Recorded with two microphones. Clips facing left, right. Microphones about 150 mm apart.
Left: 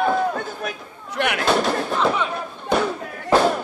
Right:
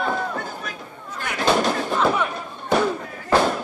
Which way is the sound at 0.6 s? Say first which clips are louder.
Left 4 dB; 70° left (ahead or behind).